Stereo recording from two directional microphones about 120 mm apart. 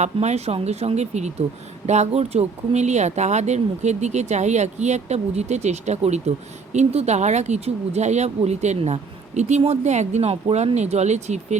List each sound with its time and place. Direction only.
0.0 s speech: 65° right (ahead or behind)